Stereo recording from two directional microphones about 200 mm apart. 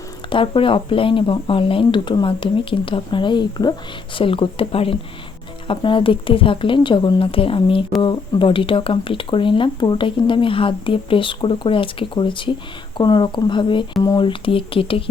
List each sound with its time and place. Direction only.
0.3 s speech: 25° left (ahead or behind)